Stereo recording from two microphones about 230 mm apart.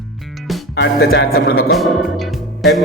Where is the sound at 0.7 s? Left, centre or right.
Left.